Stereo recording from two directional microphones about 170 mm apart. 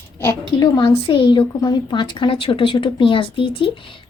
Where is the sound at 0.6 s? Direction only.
25° left (ahead or behind).